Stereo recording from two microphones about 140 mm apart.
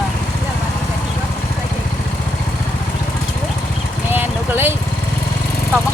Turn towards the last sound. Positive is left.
turn(degrees=-15)  # may be behind; listen again after turning